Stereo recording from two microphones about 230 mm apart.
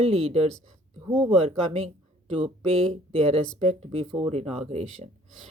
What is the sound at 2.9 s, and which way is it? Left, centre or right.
Speech, right.